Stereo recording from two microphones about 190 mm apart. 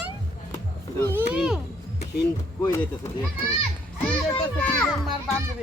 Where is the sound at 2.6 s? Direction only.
15° left (ahead or behind).